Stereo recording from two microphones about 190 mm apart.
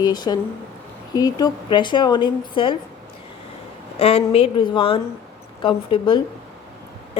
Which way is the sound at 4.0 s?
30° left (ahead or behind).